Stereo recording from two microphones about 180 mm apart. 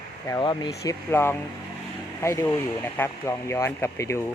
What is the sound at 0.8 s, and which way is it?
Speech, 15° left (ahead or behind).